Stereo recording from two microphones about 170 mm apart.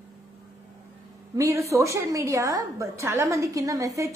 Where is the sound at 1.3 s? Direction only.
20° right (ahead or behind).